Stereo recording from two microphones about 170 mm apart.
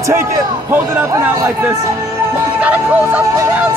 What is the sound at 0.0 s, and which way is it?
Speech, 15° right (ahead or behind).